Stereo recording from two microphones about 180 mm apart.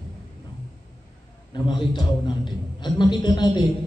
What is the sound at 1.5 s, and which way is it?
Mantra, 25° left (ahead or behind).